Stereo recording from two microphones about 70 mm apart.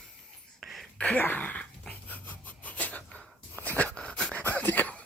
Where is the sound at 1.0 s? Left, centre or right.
Left.